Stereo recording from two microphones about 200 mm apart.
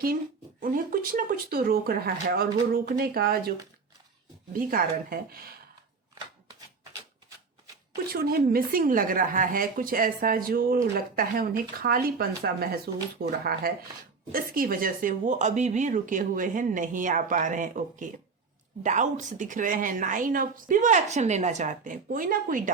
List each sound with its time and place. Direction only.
0.6 s a woman's voice: 45° right (ahead or behind)
4.5 s a woman's voice: 45° right (ahead or behind)
8.1 s a woman's voice: 50° right (ahead or behind)